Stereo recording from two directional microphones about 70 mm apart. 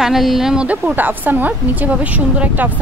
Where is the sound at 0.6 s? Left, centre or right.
Centre.